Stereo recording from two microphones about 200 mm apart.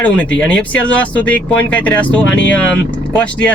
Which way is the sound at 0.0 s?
5° left (ahead or behind).